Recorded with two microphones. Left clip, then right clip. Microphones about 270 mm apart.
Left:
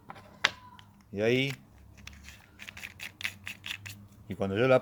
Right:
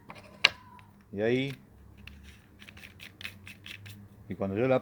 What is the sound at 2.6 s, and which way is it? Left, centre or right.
Typewriter, centre.